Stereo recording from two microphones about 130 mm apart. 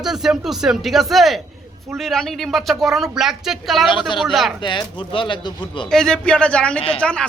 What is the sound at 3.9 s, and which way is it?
Speech, 40° left (ahead or behind).